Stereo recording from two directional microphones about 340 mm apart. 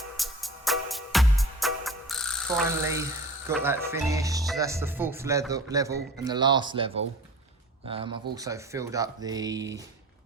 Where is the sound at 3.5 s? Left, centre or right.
Centre.